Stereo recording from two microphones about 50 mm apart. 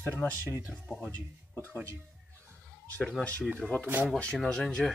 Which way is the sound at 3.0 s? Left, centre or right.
Left.